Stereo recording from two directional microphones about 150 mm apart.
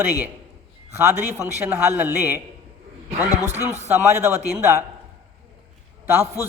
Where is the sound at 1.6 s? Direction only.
15° right (ahead or behind).